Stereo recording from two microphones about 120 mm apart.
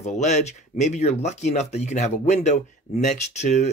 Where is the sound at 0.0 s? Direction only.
75° left (ahead or behind).